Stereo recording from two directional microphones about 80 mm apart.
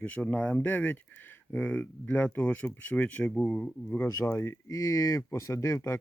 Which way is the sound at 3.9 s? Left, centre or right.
Left.